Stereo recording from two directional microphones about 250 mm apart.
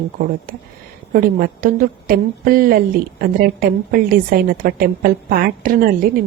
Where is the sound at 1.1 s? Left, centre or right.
Right.